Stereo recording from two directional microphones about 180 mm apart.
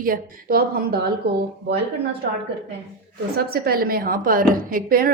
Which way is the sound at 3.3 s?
60° right (ahead or behind).